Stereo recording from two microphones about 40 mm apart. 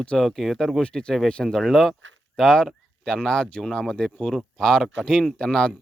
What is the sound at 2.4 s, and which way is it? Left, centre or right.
Speech, centre.